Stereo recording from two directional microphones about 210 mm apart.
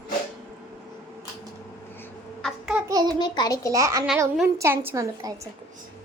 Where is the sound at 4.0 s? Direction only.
5° right (ahead or behind).